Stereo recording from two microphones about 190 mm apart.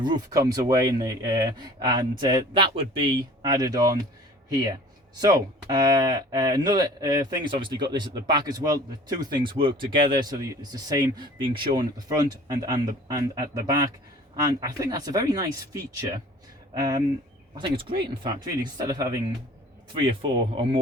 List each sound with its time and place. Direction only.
0.0 s speech: 20° right (ahead or behind)
5.1 s speech: 20° right (ahead or behind)